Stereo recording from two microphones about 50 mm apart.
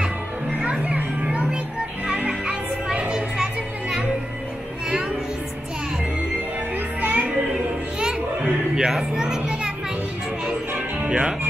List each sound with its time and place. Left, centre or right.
0.6 s children playing: right
2.0 s music: centre
7.0 s music: right
8.0 s music: centre
8.7 s children playing: centre
11.1 s music: right